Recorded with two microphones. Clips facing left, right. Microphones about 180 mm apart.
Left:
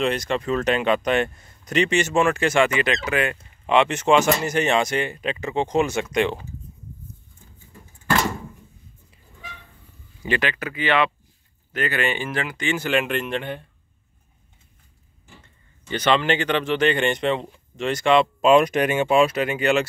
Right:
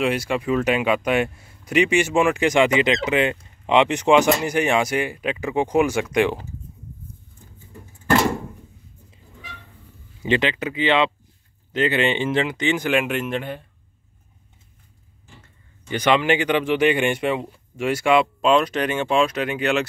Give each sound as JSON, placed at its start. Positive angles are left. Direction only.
{"t": 0.0, "sound": "speech", "side_deg": -10}
{"t": 10.2, "sound": "speech", "side_deg": -20}
{"t": 15.9, "sound": "speech", "side_deg": -10}
{"t": 18.4, "sound": "speech", "side_deg": 10}